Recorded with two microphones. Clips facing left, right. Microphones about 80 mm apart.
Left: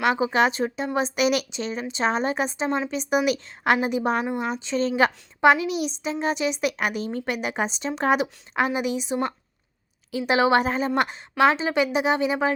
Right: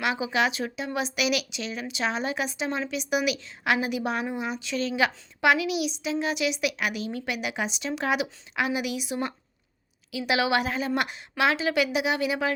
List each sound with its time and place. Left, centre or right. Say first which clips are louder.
0.0 s a woman's voice: left 5 dB; left